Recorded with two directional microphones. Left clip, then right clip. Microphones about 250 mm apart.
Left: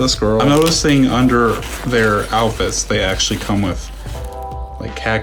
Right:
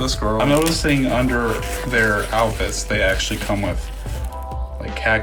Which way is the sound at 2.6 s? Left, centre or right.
Centre.